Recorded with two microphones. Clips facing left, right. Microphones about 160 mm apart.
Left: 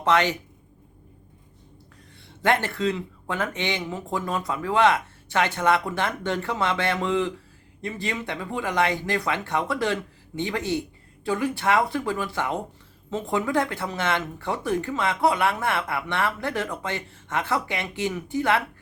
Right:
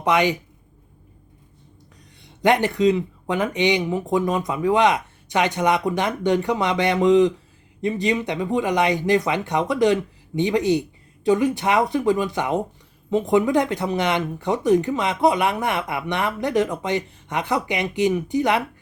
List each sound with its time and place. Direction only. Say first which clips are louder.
0.0 s speech: right 2 dB; 15° right (ahead or behind)
2.2 s speech: right 5 dB; 15° right (ahead or behind)